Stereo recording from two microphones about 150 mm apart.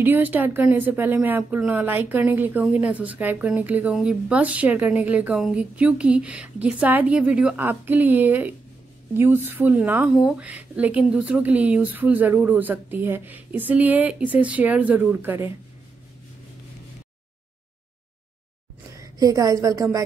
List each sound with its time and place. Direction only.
0.0 s speech: 10° right (ahead or behind)
18.9 s a woman's voice: 20° right (ahead or behind)